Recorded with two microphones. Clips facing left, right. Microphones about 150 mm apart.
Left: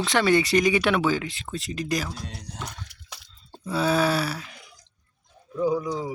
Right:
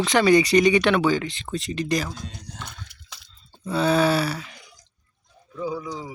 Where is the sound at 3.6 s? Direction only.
5° left (ahead or behind).